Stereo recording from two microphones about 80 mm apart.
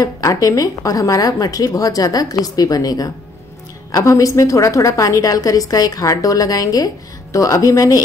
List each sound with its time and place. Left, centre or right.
0.0 s a woman's voice: left